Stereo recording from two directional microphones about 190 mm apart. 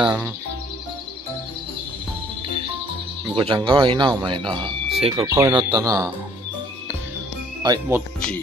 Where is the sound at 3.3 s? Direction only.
25° right (ahead or behind).